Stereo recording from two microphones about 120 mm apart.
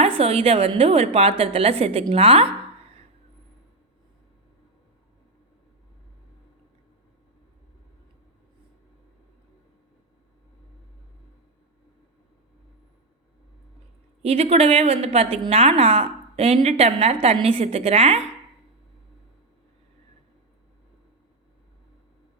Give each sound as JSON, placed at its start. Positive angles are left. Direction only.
{"t": 0.0, "sound": "a woman's voice", "side_deg": -55}
{"t": 14.2, "sound": "a woman's voice", "side_deg": -55}